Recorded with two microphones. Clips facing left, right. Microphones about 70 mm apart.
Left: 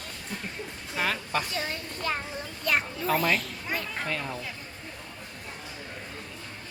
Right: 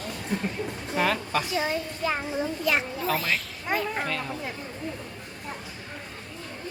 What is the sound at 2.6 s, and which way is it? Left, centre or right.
A man's voice, centre.